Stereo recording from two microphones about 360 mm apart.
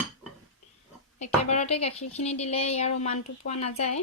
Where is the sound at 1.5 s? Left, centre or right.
Centre.